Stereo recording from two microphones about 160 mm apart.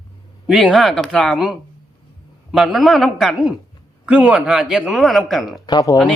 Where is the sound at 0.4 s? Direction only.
Centre (ahead or behind).